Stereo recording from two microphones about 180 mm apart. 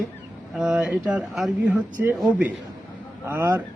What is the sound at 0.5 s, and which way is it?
A man's voice, 5° right (ahead or behind).